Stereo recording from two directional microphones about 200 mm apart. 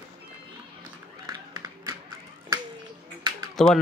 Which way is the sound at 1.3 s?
20° right (ahead or behind).